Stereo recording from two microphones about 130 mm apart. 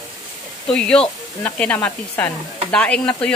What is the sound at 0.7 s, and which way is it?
Speech, 5° left (ahead or behind).